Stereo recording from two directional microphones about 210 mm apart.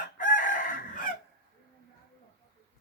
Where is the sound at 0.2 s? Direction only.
40° left (ahead or behind).